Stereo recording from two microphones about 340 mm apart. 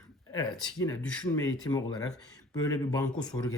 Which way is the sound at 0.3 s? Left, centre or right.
Centre.